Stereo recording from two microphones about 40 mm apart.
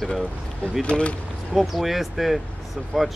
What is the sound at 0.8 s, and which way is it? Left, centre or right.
Speech, left.